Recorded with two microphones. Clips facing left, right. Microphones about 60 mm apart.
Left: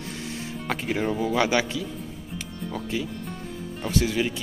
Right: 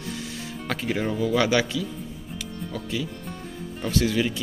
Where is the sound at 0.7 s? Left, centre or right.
Centre.